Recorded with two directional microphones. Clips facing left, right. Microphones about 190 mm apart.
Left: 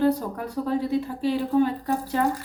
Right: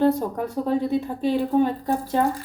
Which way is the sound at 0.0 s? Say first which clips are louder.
Right 2 dB; 25° right (ahead or behind).